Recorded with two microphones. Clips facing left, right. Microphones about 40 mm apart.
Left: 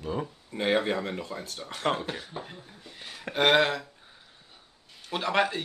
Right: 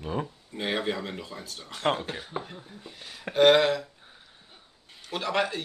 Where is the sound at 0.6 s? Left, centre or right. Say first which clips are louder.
Left 3 dB; left.